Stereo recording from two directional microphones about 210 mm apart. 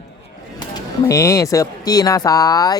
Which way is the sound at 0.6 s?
15° left (ahead or behind).